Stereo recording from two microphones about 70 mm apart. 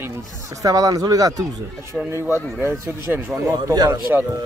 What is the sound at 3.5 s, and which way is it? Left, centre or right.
Speech, right.